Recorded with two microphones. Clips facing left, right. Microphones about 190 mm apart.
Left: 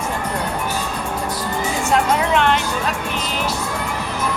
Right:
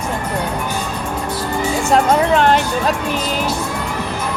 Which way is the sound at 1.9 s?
40° right (ahead or behind).